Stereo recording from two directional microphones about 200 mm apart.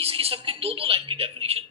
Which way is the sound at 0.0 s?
30° right (ahead or behind).